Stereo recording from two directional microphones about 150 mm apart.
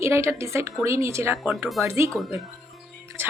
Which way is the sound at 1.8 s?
20° right (ahead or behind).